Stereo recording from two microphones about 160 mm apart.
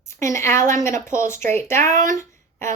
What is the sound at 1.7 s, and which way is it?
Speech, 50° right (ahead or behind).